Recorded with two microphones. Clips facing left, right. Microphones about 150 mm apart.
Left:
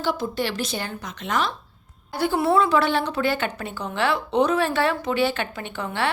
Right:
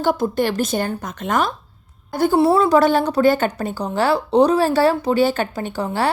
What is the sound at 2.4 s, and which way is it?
Speech, 35° right (ahead or behind).